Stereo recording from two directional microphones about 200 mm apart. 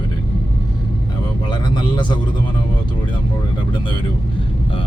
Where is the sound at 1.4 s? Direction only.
20° left (ahead or behind).